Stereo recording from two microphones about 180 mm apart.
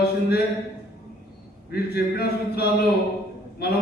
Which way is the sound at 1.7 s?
60° left (ahead or behind).